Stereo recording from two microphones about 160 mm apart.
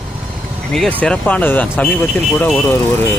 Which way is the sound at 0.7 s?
5° left (ahead or behind).